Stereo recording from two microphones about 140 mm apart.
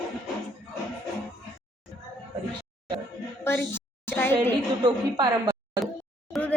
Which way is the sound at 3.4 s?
15° left (ahead or behind).